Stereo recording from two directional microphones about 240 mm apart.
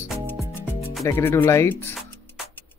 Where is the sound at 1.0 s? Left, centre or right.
Centre.